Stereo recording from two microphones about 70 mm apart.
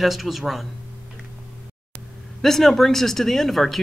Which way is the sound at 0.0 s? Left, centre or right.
Centre.